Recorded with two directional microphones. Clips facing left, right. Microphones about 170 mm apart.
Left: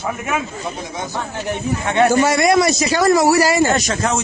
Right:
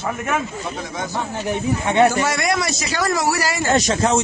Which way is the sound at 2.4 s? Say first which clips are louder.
Left 7 dB; 35° left (ahead or behind).